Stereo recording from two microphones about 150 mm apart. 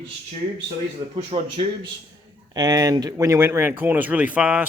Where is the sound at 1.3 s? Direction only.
35° right (ahead or behind).